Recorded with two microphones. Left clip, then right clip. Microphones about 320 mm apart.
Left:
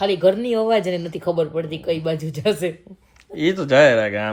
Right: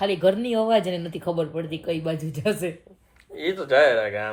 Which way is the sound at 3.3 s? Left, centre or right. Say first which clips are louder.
Left 4 dB; left.